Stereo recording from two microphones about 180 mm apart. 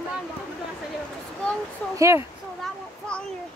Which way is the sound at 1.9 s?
15° right (ahead or behind).